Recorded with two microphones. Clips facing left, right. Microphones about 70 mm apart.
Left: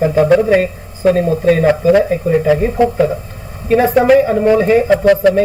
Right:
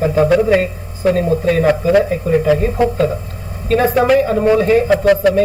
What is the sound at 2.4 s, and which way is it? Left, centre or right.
A woman's voice, centre.